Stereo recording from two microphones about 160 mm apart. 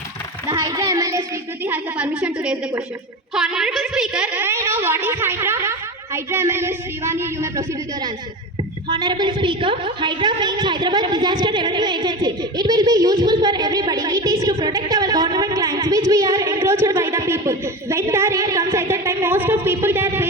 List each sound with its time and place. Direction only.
0.5 s a child's voice: 20° right (ahead or behind)
1.6 s a woman's voice: 10° right (ahead or behind)
8.9 s a woman's voice: 30° right (ahead or behind); by 20.2 s 15° right (ahead or behind)